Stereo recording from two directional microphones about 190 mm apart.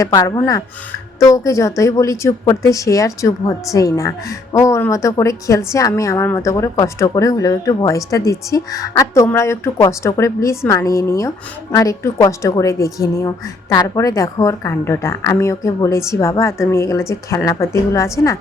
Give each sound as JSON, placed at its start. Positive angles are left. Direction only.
{"t": 0.0, "sound": "a woman's voice", "side_deg": 20}